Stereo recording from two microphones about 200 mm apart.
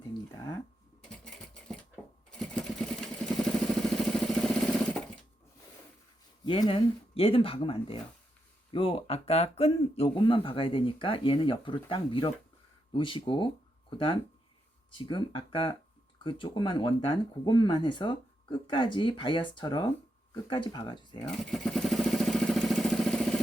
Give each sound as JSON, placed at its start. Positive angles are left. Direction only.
{"t": 0.3, "sound": "a sound", "side_deg": 20}
{"t": 2.4, "sound": "vehicle", "side_deg": 5}
{"t": 6.4, "sound": "speech", "side_deg": 25}
{"t": 14.9, "sound": "speech", "side_deg": 25}
{"t": 21.2, "sound": "vehicle", "side_deg": 0}